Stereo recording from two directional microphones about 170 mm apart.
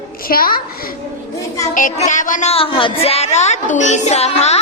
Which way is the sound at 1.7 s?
45° left (ahead or behind).